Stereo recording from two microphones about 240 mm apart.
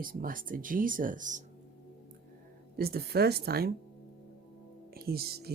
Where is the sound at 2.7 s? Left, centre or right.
Right.